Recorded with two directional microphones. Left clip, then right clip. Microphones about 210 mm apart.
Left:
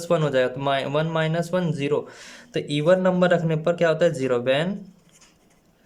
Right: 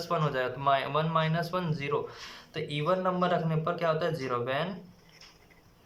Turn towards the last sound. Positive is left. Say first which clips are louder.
# left 9 dB
turn(degrees=50)  # may be behind; listen again after turning